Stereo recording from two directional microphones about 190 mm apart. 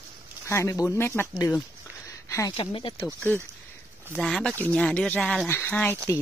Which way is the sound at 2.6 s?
30° left (ahead or behind).